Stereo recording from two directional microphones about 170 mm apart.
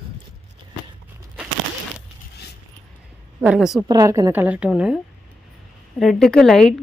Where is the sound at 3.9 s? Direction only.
20° right (ahead or behind).